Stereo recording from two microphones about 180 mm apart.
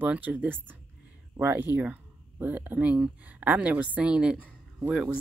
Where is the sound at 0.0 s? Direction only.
10° right (ahead or behind).